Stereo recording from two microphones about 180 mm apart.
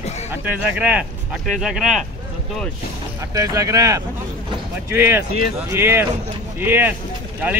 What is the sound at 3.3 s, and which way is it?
Speech, 20° right (ahead or behind).